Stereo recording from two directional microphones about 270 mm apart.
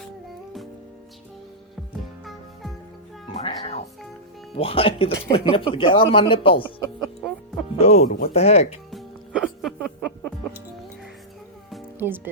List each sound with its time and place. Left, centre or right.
3.3 s music: left
4.5 s speech: left
7.8 s speech: left
8.9 s music: centre
11.7 s music: centre